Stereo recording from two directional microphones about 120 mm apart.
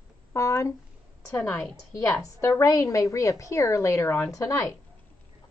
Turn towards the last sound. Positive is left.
turn(degrees=25)  # may be behind; listen again after turning